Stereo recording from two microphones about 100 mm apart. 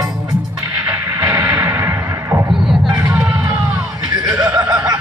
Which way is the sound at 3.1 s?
30° right (ahead or behind).